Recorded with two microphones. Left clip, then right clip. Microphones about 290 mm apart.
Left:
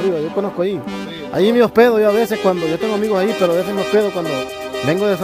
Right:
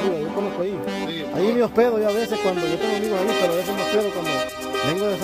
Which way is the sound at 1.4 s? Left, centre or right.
Left.